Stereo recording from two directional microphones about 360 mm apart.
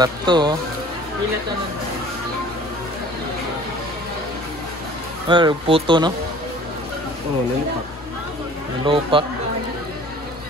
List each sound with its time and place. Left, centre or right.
0.0 s speech: centre
5.3 s speech: centre
8.8 s speech: centre